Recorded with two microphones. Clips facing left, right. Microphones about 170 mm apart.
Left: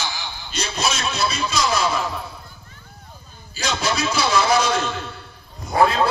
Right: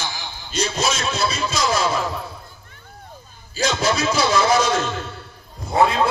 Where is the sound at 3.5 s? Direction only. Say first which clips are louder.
Right 3 dB; 50° right (ahead or behind).